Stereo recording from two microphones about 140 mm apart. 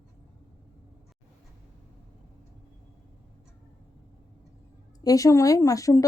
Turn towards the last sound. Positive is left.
turn(degrees=25)  # may be behind; listen again after turning